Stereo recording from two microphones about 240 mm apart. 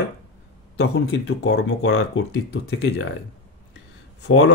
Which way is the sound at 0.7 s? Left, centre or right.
Left.